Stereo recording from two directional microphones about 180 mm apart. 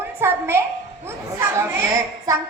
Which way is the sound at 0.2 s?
15° right (ahead or behind).